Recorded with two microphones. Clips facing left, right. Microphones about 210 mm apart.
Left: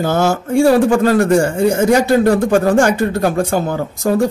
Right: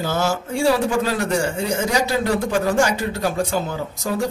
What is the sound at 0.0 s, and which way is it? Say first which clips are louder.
A man's voice: left 6 dB; 50° left (ahead or behind).